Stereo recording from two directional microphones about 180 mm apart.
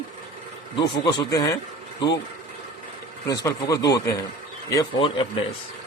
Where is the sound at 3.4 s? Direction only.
20° left (ahead or behind).